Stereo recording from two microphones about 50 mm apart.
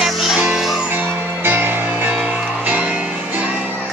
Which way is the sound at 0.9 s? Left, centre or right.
Right.